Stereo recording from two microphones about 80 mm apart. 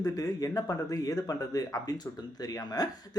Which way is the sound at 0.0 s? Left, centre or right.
Left.